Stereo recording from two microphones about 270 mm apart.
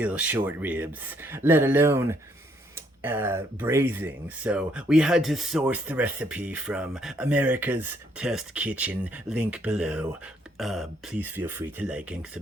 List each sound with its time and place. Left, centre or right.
0.0 s speech: centre